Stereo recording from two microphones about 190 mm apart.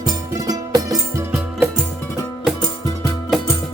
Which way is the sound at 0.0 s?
20° right (ahead or behind).